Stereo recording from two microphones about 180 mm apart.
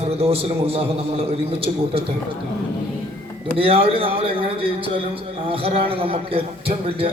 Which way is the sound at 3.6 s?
30° right (ahead or behind).